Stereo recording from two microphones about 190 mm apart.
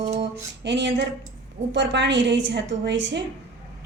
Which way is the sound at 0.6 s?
65° right (ahead or behind).